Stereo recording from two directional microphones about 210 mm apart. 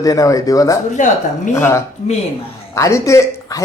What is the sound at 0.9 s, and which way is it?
Speech, 35° left (ahead or behind).